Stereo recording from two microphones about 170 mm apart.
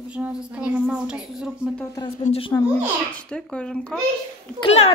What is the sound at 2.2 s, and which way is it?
Speech, 35° left (ahead or behind).